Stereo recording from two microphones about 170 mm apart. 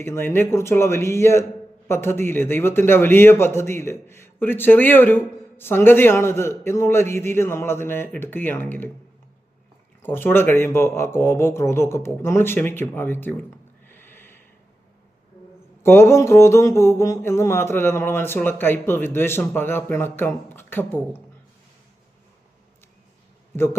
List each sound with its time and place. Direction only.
0.0 s a man's voice: 15° left (ahead or behind)
10.0 s a man's voice: 15° left (ahead or behind)
13.9 s snort: 15° left (ahead or behind)
15.8 s a man's voice: 15° left (ahead or behind)